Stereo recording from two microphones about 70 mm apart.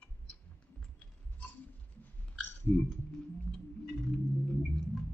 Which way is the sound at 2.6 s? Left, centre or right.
Left.